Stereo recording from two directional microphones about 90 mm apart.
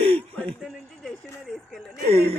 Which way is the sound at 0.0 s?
90° right.